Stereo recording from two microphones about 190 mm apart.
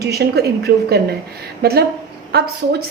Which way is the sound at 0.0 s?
60° right (ahead or behind).